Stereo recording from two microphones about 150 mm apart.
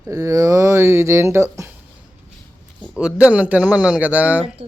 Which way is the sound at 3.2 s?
10° right (ahead or behind).